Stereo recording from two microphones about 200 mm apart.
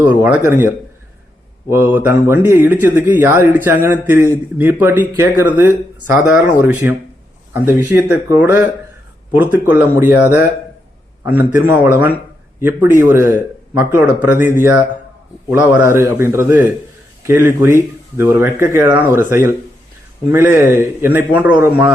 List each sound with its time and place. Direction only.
0.0 s speech: 10° right (ahead or behind)
1.7 s speech: 10° right (ahead or behind)
11.3 s speech: 10° right (ahead or behind)